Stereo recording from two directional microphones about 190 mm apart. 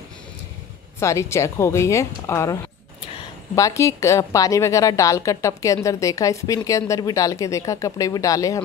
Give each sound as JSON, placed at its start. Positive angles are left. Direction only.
{"t": 0.9, "sound": "a woman's voice", "side_deg": 15}
{"t": 3.5, "sound": "a woman's voice", "side_deg": 15}